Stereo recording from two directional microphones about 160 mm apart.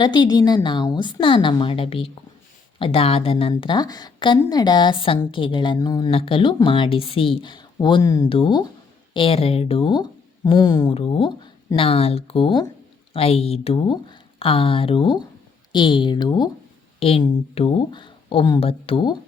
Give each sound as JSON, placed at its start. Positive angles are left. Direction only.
{"t": 0.0, "sound": "a woman's voice", "side_deg": 30}